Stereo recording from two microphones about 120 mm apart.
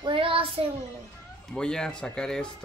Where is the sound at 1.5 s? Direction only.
5° left (ahead or behind).